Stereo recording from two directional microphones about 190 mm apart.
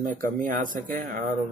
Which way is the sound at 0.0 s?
45° right (ahead or behind).